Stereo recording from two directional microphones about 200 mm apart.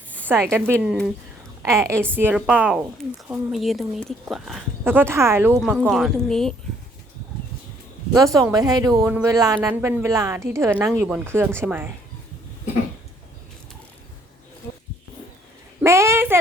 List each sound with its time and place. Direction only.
0.3 s a woman's voice: 5° right (ahead or behind)
5.9 s a woman's voice: centre (ahead or behind)
8.1 s speech: 15° right (ahead or behind)
15.8 s a sound: 15° right (ahead or behind)